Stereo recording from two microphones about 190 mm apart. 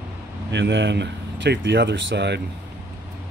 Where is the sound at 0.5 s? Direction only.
70° right (ahead or behind).